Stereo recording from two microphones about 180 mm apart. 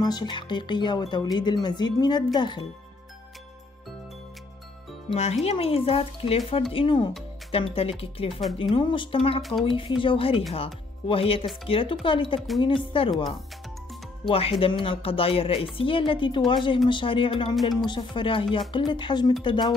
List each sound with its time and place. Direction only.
0.0 s speech: 25° left (ahead or behind)
5.1 s speech: 35° left (ahead or behind)
14.2 s speech: 30° left (ahead or behind)